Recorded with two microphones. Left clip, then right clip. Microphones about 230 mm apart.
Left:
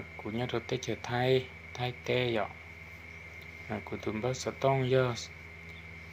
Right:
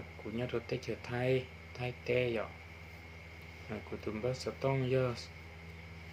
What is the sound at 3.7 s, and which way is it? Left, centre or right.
Speech, left.